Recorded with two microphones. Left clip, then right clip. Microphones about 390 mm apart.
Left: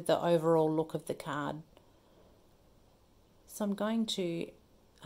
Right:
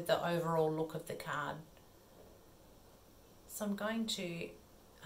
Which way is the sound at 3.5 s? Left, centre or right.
Left.